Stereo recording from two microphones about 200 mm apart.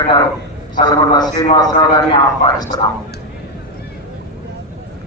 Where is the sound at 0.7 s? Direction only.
20° left (ahead or behind).